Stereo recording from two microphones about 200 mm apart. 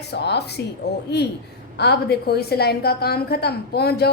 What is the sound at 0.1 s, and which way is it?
Speech, 55° left (ahead or behind).